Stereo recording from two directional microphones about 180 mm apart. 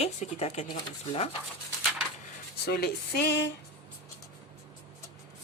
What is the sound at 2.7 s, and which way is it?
Speech, 65° left (ahead or behind).